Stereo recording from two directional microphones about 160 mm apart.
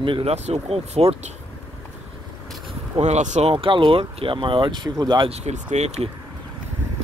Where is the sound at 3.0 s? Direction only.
45° right (ahead or behind).